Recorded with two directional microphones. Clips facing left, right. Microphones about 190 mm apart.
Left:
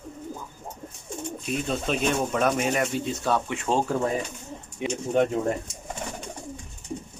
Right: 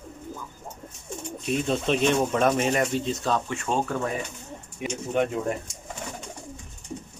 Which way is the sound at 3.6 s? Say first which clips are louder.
Left 3 dB; 30° left (ahead or behind).